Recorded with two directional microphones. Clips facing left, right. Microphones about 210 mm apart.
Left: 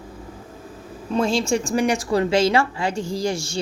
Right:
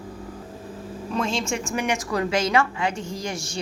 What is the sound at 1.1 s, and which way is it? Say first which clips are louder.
A woman's voice: left 6 dB; 35° left (ahead or behind).